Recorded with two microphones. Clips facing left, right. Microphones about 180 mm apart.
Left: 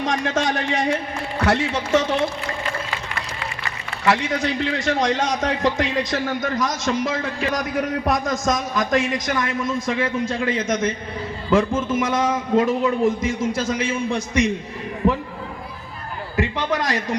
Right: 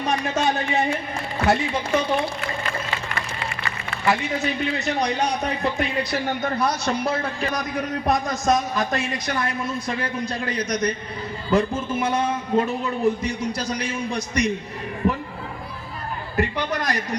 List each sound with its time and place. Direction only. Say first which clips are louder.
0.0 s a man's voice: left 1 dB; 90° left
4.0 s a man's voice: left 2 dB; 90° left
9.2 s a man's voice: left 2 dB; 35° right (ahead or behind)
9.5 s a man's voice: left 4 dB; 90° left
16.6 s a man's voice: left 2 dB; 90° left